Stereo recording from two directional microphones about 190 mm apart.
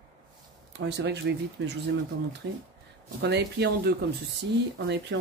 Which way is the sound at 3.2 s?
60° right (ahead or behind).